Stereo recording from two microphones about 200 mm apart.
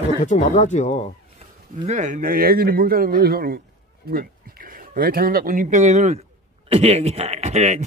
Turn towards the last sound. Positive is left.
turn(degrees=-35)  # may be behind; listen again after turning